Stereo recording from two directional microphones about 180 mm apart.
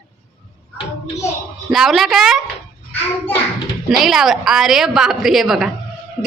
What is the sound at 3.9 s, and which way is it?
A woman's voice, centre (ahead or behind).